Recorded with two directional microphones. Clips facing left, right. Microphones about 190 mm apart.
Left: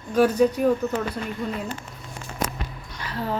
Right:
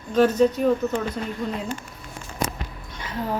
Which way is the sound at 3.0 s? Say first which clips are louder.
Right 1 dB; 20° right (ahead or behind).